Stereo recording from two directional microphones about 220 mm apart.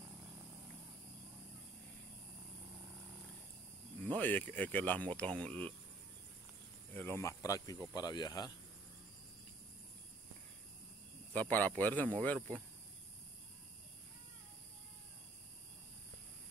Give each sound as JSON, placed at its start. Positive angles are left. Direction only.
{"t": 4.1, "sound": "speech", "side_deg": 5}
{"t": 6.9, "sound": "speech", "side_deg": 10}
{"t": 11.3, "sound": "speech", "side_deg": 5}